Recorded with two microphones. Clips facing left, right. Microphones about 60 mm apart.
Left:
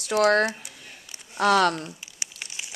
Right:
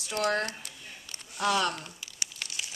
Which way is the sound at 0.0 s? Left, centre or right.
Left.